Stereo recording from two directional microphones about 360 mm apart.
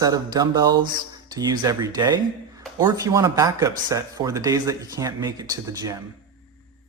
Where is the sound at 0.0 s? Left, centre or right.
Centre.